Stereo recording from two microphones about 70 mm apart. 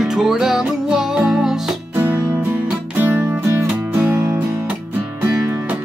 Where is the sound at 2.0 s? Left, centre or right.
Right.